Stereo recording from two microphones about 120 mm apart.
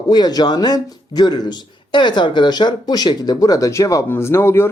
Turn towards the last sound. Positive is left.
turn(degrees=20)  # may be behind; listen again after turning